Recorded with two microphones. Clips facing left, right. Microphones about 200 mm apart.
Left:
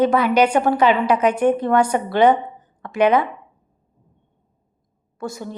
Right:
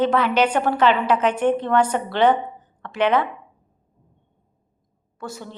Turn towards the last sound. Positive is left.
turn(degrees=10)  # may be behind; listen again after turning